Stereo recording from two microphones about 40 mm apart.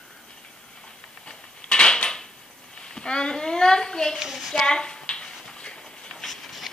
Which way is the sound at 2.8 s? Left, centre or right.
Left.